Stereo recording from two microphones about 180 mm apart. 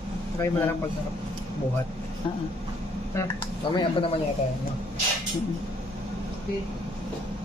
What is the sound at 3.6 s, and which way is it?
Speech, 30° left (ahead or behind).